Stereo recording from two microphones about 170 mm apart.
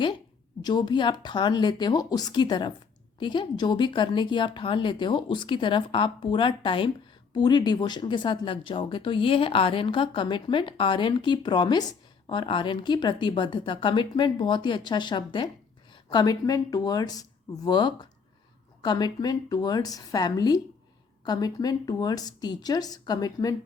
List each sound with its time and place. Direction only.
0.6 s speech: 25° left (ahead or behind)